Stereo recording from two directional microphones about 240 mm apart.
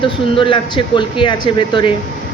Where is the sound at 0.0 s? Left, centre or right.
Left.